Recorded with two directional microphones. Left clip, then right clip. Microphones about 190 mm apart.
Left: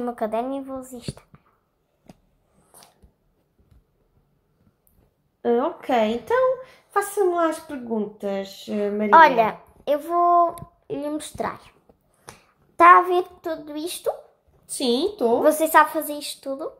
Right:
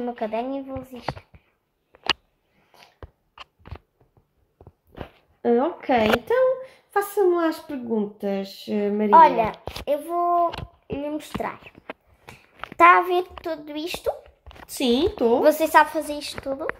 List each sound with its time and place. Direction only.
0.0 s speech: 5° left (ahead or behind)
2.7 s a sound: 10° left (ahead or behind)
5.4 s a woman's voice: 25° right (ahead or behind)
6.2 s a woman's voice: 45° right (ahead or behind)
9.1 s a child's voice: 5° left (ahead or behind)
12.3 s a sound: 10° left (ahead or behind)
13.4 s a child's voice: 10° left (ahead or behind)
14.8 s a woman's voice: 25° right (ahead or behind)
15.5 s speech: centre (ahead or behind)